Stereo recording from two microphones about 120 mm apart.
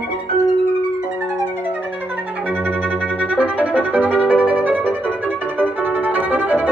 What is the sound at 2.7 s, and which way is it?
Violin, 15° right (ahead or behind).